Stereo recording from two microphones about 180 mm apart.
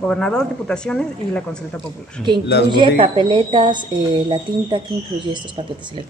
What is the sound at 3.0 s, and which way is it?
A woman's voice, 30° right (ahead or behind).